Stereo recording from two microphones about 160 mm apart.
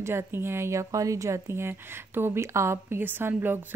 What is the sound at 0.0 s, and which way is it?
Speech, 15° right (ahead or behind).